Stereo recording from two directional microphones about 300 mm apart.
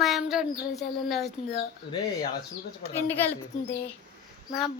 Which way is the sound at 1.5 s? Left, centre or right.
Centre.